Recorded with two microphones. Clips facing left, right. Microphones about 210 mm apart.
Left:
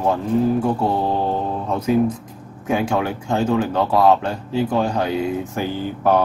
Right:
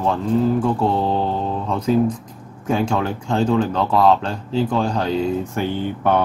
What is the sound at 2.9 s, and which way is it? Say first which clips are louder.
Speech: even; 5° left (ahead or behind).